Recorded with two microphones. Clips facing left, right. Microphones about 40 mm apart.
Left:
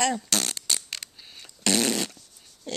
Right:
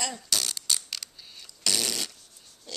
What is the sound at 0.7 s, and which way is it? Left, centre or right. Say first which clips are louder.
Scissors: left 1 dB; left.